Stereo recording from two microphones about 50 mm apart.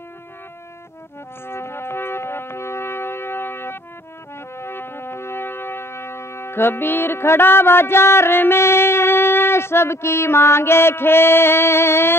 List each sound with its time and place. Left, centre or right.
1.5 s music: left